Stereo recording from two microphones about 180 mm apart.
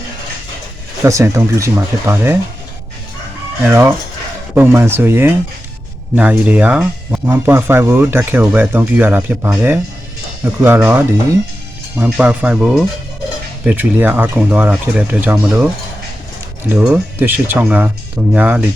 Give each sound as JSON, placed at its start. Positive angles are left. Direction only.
{"t": 1.0, "sound": "speech", "side_deg": -15}
{"t": 3.6, "sound": "speech", "side_deg": -10}